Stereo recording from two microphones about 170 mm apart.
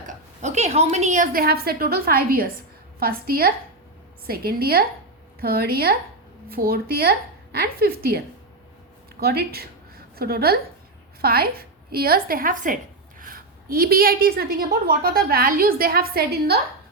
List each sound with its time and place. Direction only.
0.4 s a woman's voice: 40° right (ahead or behind); by 8.2 s 65° right (ahead or behind)
9.2 s a woman's voice: 70° right (ahead or behind)